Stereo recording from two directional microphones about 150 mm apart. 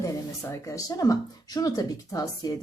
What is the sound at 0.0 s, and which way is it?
Speech, 20° left (ahead or behind).